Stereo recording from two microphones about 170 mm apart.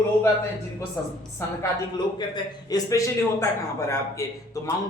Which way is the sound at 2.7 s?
20° left (ahead or behind).